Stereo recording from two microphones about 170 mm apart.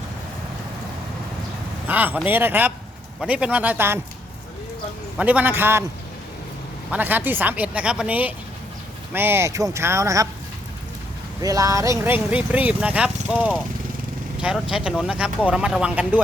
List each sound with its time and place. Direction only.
1.9 s speech: 10° right (ahead or behind)
5.1 s speech: 10° right (ahead or behind)
6.9 s speech: 10° right (ahead or behind)
11.4 s speech: 20° right (ahead or behind)